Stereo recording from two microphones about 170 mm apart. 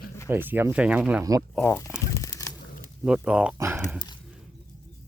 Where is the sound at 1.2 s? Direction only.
20° right (ahead or behind).